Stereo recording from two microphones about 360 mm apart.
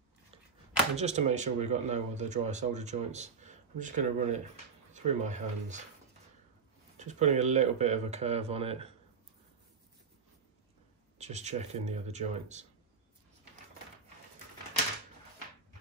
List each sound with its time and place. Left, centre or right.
0.9 s speech: centre
7.0 s speech: centre
11.1 s speech: centre